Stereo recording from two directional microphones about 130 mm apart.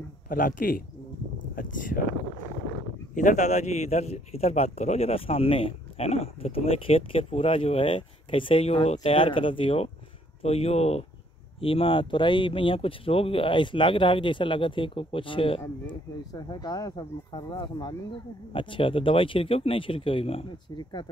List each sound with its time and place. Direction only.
0.3 s speech: 90° left
3.2 s a man's voice: 70° left (ahead or behind); by 21.1 s 35° left (ahead or behind)